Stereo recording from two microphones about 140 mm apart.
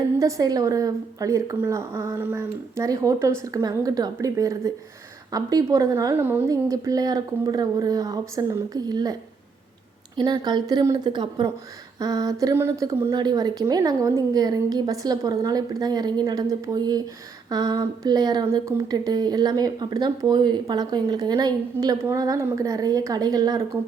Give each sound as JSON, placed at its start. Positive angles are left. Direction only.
{"t": 0.2, "sound": "speech", "side_deg": -25}
{"t": 10.2, "sound": "speech", "side_deg": -30}